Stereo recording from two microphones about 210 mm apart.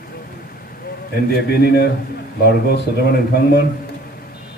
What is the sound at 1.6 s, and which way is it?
Speech, 50° left (ahead or behind).